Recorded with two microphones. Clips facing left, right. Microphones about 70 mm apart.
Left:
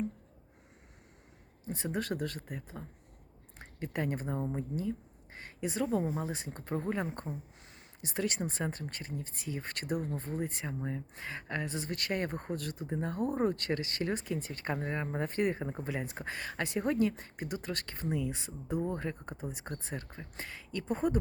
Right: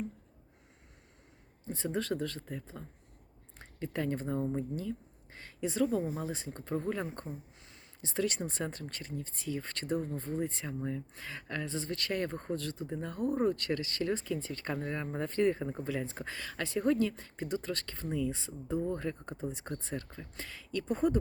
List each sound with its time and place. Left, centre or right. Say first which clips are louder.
1.6 s speech: right 1 dB; left
3.9 s speech: right 1 dB; left
4.8 s a sound: left 2 dB; left
5.5 s speech: right 1 dB; centre
20.8 s speech: right 1 dB; centre